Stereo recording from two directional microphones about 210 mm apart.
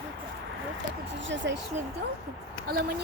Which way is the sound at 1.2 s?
60° right (ahead or behind).